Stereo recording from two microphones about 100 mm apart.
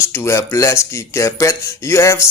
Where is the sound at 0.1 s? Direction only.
25° left (ahead or behind).